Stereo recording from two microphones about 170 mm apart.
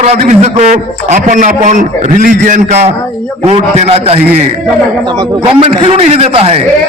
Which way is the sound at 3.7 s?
35° right (ahead or behind).